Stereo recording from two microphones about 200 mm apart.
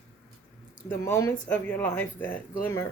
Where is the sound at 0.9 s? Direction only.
15° left (ahead or behind).